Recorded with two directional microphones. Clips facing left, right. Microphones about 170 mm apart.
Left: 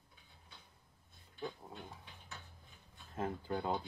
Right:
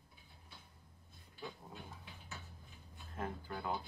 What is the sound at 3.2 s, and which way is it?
Speech, 20° left (ahead or behind).